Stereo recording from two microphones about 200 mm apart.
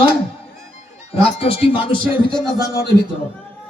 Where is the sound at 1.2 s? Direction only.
30° left (ahead or behind).